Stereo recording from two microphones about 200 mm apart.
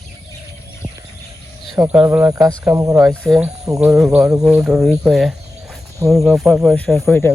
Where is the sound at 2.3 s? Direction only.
15° right (ahead or behind).